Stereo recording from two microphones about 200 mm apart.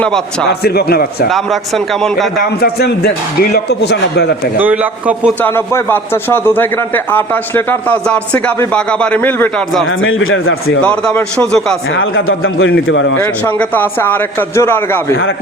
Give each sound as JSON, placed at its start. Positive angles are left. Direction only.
{"t": 0.6, "sound": "speech", "side_deg": 50}
{"t": 1.3, "sound": "a man's voice", "side_deg": 0}
{"t": 2.6, "sound": "speech", "side_deg": 55}
{"t": 4.5, "sound": "a man's voice", "side_deg": -10}
{"t": 5.4, "sound": "a man's voice", "side_deg": 10}
{"t": 10.0, "sound": "a man's voice", "side_deg": 80}
{"t": 10.8, "sound": "a man's voice", "side_deg": 5}
{"t": 11.9, "sound": "a man's voice", "side_deg": 85}
{"t": 13.1, "sound": "a man's voice", "side_deg": 10}